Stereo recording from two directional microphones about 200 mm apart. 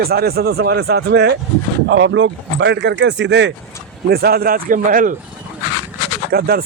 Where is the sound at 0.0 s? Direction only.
50° right (ahead or behind).